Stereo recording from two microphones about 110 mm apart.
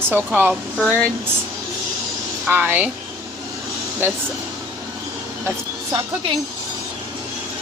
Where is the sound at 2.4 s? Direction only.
20° right (ahead or behind).